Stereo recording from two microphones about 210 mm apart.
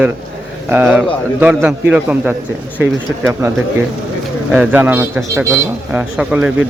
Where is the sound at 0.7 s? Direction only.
5° right (ahead or behind).